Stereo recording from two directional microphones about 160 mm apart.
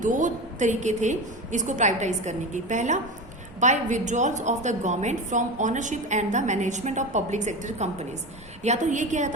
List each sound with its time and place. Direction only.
0.0 s a woman's voice: 50° right (ahead or behind)